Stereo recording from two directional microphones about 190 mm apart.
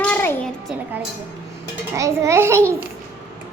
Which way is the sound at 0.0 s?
10° left (ahead or behind).